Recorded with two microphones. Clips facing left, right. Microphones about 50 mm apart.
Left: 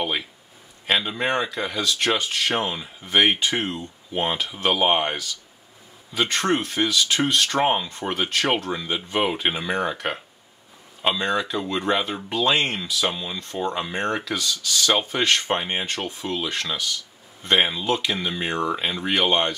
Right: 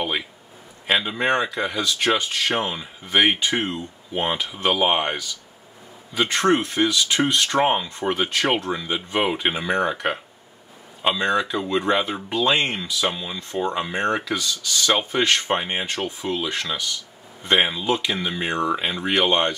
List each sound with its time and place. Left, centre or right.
0.8 s speech: centre
6.7 s speech: centre
7.6 s speech: centre
9.9 s speech: centre
13.4 s speech: centre